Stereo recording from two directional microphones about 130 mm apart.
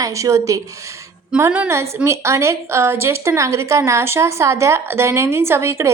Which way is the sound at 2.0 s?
20° right (ahead or behind).